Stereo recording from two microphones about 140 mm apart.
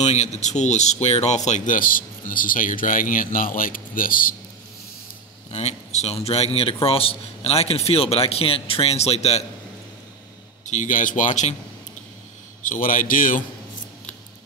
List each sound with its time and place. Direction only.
0.0 s a man's voice: 55° left (ahead or behind)
1.8 s speech: 85° left
5.5 s a man's voice: 50° left (ahead or behind)
10.6 s speech: 60° left (ahead or behind)
12.6 s a man's voice: 70° left (ahead or behind)